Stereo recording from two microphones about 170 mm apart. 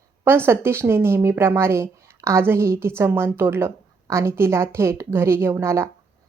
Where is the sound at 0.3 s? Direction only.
15° right (ahead or behind).